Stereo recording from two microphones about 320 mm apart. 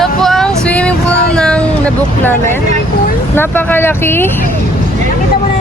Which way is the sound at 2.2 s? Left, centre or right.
Centre.